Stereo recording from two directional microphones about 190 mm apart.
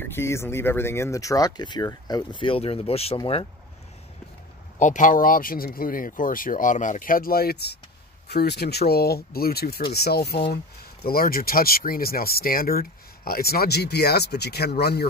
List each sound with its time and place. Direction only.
0.0 s speech: 10° left (ahead or behind); by 3.4 s 30° left (ahead or behind)
4.7 s speech: 40° left (ahead or behind); by 15.0 s 55° left (ahead or behind)